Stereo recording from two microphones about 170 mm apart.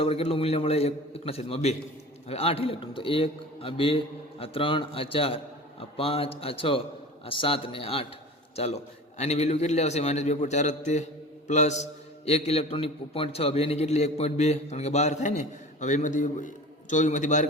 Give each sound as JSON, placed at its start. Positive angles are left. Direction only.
{"t": 0.0, "sound": "a man's voice", "side_deg": 35}